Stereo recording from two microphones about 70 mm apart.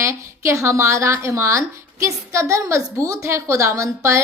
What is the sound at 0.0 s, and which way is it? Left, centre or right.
Speech, right.